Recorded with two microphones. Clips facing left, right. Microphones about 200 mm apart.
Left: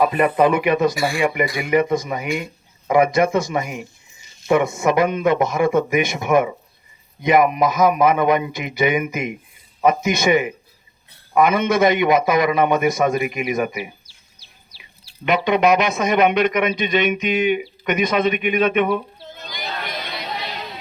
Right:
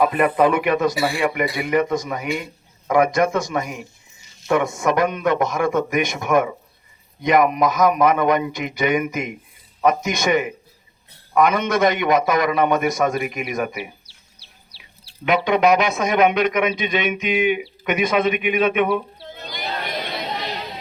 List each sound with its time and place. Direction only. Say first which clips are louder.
0.0 s a man's voice: left 1 dB; centre (ahead or behind)
14.1 s bird: right 1 dB; 65° right (ahead or behind)
14.8 s speech: even; centre (ahead or behind)